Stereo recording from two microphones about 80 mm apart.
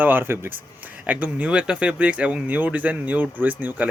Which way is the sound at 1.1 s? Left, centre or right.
Centre.